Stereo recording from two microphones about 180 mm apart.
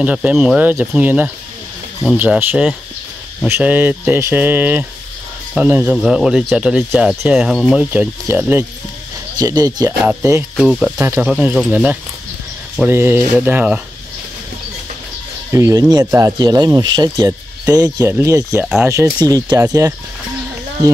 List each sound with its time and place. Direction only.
0.0 s speech: 5° right (ahead or behind)
9.4 s speech: 20° right (ahead or behind)
10.5 s speech: 5° right (ahead or behind)
15.5 s speech: 20° right (ahead or behind)